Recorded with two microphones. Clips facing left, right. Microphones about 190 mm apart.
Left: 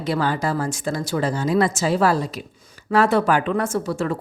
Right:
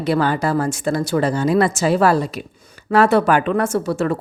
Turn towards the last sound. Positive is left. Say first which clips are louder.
# right 4 dB
turn(degrees=-65)  # may be behind; listen again after turning